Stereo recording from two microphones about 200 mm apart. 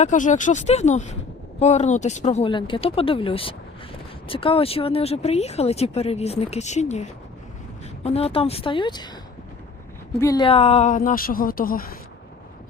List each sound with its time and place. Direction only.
0.0 s speech: 40° left (ahead or behind); by 9.0 s 20° left (ahead or behind)
10.2 s speech: 20° left (ahead or behind); by 11.9 s 45° left (ahead or behind)